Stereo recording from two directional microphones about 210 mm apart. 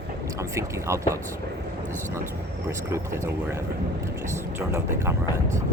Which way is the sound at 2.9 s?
15° right (ahead or behind).